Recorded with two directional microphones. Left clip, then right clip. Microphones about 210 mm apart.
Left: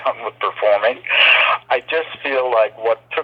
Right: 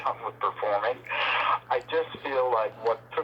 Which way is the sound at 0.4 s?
25° left (ahead or behind).